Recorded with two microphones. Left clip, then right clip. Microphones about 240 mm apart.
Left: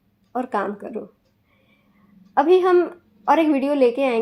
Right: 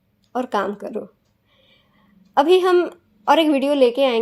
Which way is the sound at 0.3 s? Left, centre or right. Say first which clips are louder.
Right 2 dB; right.